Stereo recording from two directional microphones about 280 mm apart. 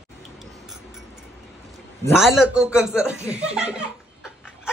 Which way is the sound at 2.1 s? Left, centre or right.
Centre.